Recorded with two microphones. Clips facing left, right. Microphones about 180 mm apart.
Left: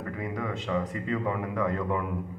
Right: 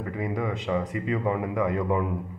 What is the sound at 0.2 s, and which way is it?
A man's voice, 15° right (ahead or behind).